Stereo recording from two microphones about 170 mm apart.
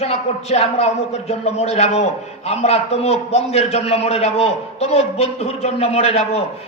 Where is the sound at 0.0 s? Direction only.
40° left (ahead or behind).